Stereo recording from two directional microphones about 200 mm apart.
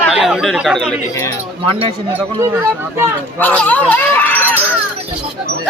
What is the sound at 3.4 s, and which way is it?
Speech, 10° left (ahead or behind).